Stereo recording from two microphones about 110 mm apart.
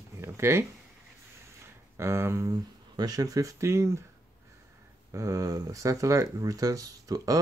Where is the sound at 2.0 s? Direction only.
25° right (ahead or behind).